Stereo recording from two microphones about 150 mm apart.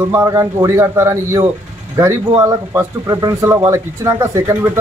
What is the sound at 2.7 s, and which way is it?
Speech, 20° right (ahead or behind).